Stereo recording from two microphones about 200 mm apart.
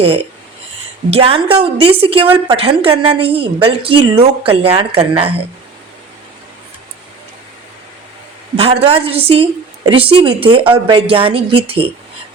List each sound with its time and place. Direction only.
0.0 s a woman's voice: 30° right (ahead or behind)
8.5 s a woman's voice: 30° right (ahead or behind)